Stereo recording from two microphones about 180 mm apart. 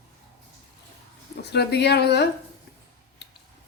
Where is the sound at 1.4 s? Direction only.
65° left (ahead or behind).